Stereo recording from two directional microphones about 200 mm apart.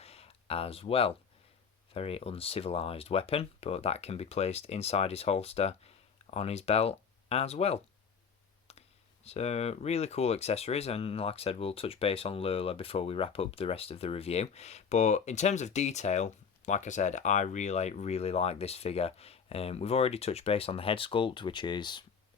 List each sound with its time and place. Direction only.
0.0 s a sound: 30° left (ahead or behind)
1.9 s speech: 30° left (ahead or behind)
9.2 s speech: 30° left (ahead or behind)